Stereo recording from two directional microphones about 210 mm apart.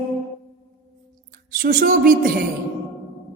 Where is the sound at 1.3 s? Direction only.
45° right (ahead or behind).